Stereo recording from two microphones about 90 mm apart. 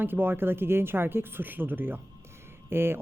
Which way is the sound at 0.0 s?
20° right (ahead or behind).